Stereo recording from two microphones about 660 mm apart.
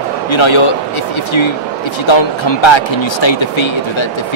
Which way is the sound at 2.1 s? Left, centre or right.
Left.